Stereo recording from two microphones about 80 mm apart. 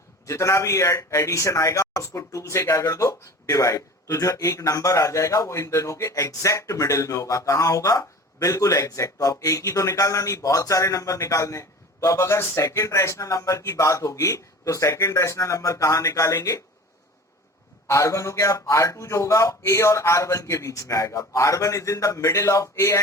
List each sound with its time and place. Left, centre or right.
0.3 s a man's voice: left
17.8 s a man's voice: left